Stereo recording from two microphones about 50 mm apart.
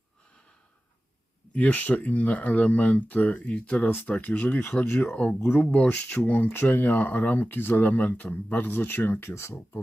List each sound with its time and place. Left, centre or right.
1.5 s speech: left
5.1 s speech: left
6.5 s speech: left
8.6 s speech: left
9.3 s speech: left